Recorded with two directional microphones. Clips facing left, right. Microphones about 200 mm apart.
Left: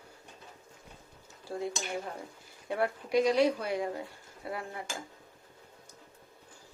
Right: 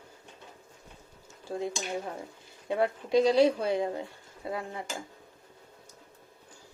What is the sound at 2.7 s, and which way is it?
Speech, 20° right (ahead or behind).